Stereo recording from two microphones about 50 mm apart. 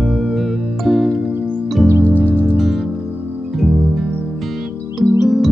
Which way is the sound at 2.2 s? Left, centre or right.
Left.